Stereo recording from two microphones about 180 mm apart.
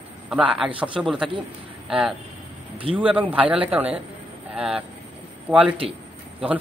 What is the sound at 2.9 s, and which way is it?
A man's voice, 10° right (ahead or behind).